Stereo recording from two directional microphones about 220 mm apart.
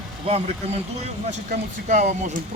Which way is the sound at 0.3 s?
30° right (ahead or behind).